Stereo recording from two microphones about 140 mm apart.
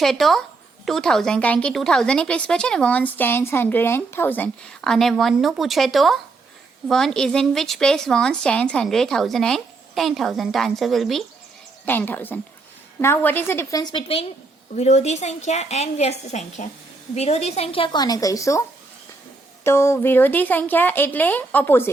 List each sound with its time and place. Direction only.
0.0 s a woman's voice: centre (ahead or behind)
11.9 s speech: 15° left (ahead or behind); by 14.2 s 35° left (ahead or behind)
14.8 s a woman's voice: 50° left (ahead or behind); by 18.6 s 25° left (ahead or behind)
19.6 s speech: 20° left (ahead or behind)